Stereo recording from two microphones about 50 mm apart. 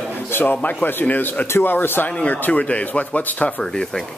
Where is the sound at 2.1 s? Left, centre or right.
Left.